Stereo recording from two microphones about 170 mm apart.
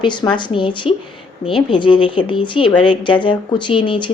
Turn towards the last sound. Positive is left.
turn(degrees=30)  # may be behind; listen again after turning